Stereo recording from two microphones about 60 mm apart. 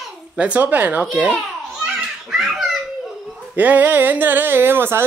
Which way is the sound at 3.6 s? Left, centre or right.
Right.